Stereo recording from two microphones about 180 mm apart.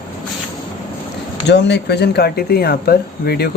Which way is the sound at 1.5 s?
70° left (ahead or behind).